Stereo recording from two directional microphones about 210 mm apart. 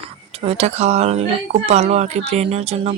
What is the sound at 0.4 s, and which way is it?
Speech, 30° right (ahead or behind).